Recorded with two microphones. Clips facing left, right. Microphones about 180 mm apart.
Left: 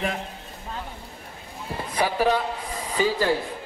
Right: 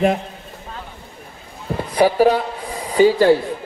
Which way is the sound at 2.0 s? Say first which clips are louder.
Right 7 dB; 40° right (ahead or behind).